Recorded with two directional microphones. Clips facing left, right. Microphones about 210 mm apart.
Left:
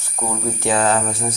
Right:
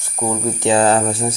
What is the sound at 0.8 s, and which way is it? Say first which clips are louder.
Speech: right 4 dB; 30° right (ahead or behind).